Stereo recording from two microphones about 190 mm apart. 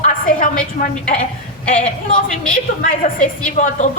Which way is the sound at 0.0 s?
45° left (ahead or behind).